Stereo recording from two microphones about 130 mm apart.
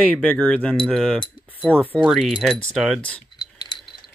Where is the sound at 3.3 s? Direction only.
35° left (ahead or behind).